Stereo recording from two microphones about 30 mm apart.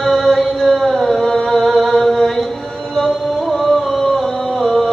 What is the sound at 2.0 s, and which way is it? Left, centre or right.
Chant, centre.